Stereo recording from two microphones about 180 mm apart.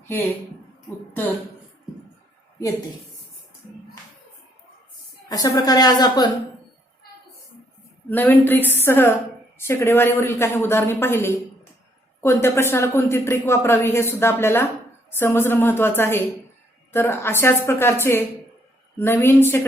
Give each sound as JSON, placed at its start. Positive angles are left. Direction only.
{"t": 5.3, "sound": "a woman's voice", "side_deg": 20}
{"t": 8.1, "sound": "speech", "side_deg": 10}